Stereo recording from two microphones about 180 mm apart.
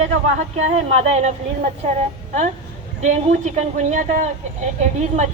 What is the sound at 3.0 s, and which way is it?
Speech, 40° right (ahead or behind).